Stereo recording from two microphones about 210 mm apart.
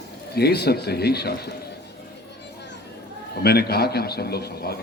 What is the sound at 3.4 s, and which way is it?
A man's voice, 50° left (ahead or behind).